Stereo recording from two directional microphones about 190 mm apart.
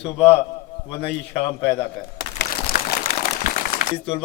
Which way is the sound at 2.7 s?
45° left (ahead or behind).